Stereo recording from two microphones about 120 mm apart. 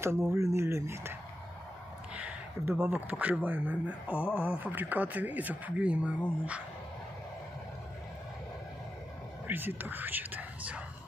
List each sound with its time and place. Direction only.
0.3 s speech: 25° right (ahead or behind)
2.1 s speech: 15° right (ahead or behind)
9.5 s speech: 15° right (ahead or behind)